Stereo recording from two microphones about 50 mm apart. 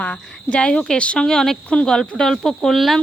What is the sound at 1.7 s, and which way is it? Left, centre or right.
Speech, left.